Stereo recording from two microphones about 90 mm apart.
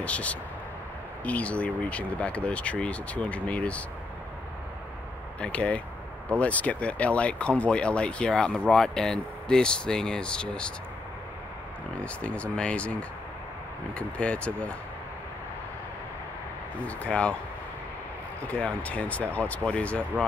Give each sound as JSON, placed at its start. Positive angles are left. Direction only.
{"t": 0.0, "sound": "speech", "side_deg": 15}
{"t": 5.4, "sound": "speech", "side_deg": 15}
{"t": 12.0, "sound": "speech", "side_deg": 15}
{"t": 13.9, "sound": "speech", "side_deg": 15}
{"t": 16.8, "sound": "speech", "side_deg": 15}
{"t": 18.5, "sound": "speech", "side_deg": 15}